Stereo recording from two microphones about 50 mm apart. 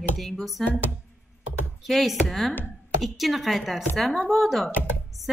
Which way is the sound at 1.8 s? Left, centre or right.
Centre.